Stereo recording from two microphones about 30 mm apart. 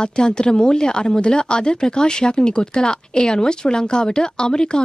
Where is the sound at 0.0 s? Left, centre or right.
Left.